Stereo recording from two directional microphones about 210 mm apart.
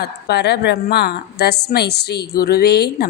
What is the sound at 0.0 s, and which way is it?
A woman's voice, 50° left (ahead or behind).